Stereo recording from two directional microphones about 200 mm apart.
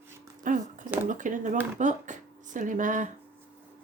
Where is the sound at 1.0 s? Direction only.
40° right (ahead or behind).